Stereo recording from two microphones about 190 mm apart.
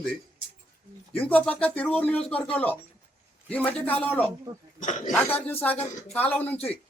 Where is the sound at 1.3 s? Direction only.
5° left (ahead or behind).